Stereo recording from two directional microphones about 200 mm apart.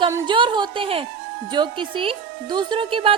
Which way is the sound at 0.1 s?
25° right (ahead or behind).